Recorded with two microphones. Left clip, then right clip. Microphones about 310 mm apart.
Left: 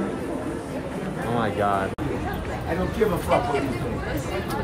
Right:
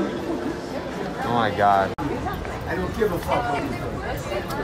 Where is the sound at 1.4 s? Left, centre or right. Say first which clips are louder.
Right 5 dB; centre.